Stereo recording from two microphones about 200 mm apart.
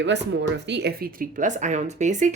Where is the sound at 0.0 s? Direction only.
60° right (ahead or behind).